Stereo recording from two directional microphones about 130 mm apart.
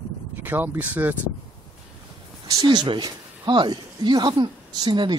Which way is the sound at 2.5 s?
30° right (ahead or behind).